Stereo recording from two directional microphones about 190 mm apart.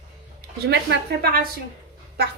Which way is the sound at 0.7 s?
55° right (ahead or behind).